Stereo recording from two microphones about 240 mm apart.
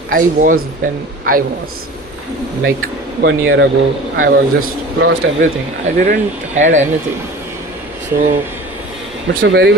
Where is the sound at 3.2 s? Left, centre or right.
Right.